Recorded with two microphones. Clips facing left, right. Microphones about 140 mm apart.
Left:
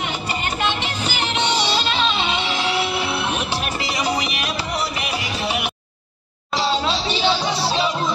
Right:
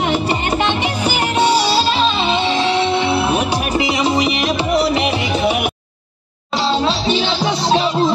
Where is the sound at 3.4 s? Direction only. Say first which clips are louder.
Right 7 dB; 15° right (ahead or behind).